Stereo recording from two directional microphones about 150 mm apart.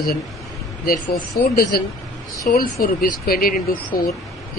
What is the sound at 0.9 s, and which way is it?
Speech, 70° left (ahead or behind).